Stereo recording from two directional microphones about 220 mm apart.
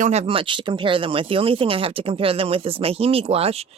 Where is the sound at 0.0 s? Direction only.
30° right (ahead or behind).